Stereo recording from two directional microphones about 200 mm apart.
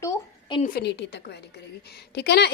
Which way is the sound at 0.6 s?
45° left (ahead or behind).